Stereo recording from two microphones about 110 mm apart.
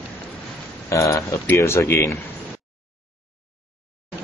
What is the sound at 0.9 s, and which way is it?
Speech, 30° left (ahead or behind).